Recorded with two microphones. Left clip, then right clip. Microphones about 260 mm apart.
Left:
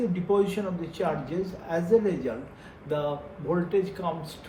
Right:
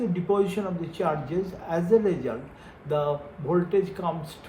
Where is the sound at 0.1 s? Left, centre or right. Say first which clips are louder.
Even; right.